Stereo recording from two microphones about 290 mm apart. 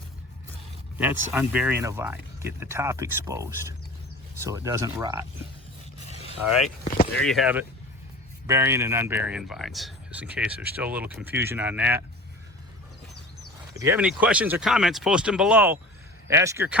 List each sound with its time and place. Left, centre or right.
0.9 s speech: centre
6.1 s a sound: centre
7.2 s speech: centre
13.7 s speech: centre